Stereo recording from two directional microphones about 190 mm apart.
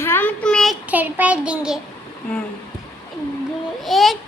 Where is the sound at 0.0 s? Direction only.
10° left (ahead or behind); by 1.8 s 5° right (ahead or behind).